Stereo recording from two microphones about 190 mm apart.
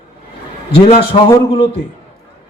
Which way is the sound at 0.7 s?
30° left (ahead or behind).